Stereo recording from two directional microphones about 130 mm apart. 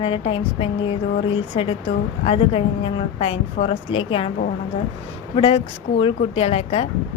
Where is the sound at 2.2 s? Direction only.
45° left (ahead or behind).